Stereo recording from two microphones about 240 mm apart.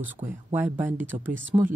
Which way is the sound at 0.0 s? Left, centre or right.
Centre.